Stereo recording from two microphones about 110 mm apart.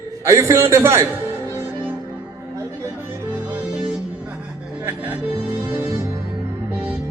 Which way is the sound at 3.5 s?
10° right (ahead or behind).